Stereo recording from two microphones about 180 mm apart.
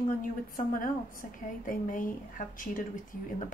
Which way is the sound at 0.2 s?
50° left (ahead or behind).